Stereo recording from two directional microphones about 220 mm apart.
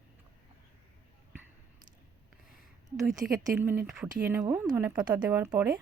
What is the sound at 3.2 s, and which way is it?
Speech, 45° right (ahead or behind).